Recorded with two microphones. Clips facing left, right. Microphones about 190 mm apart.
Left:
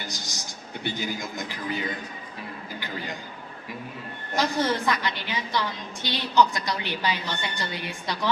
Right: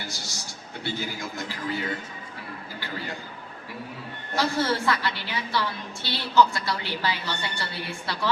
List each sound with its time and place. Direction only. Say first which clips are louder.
0.0 s a man's voice: left 1 dB; 15° left (ahead or behind)
4.4 s a woman's voice: even; 15° left (ahead or behind)